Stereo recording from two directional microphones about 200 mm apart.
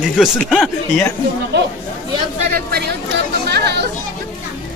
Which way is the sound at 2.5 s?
50° right (ahead or behind).